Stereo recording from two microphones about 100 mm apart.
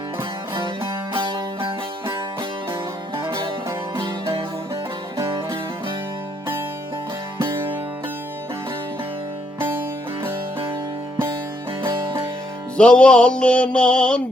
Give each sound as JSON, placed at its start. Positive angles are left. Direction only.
{"t": 0.2, "sound": "music", "side_deg": -50}
{"t": 3.9, "sound": "music", "side_deg": -50}
{"t": 4.7, "sound": "music", "side_deg": -30}
{"t": 7.3, "sound": "music", "side_deg": -25}
{"t": 11.8, "sound": "music", "side_deg": -55}
{"t": 12.7, "sound": "music", "side_deg": 10}